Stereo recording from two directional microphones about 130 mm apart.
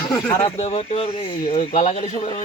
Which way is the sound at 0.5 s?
50° left (ahead or behind).